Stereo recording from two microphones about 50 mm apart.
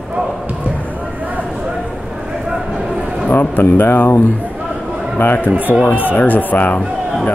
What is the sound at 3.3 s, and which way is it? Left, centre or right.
Speech, left.